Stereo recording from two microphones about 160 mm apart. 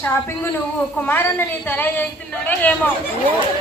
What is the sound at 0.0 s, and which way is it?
A woman's voice, 15° left (ahead or behind).